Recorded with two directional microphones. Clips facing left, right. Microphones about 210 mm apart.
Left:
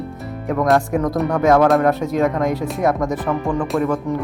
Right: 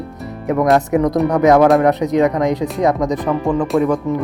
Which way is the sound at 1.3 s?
20° right (ahead or behind).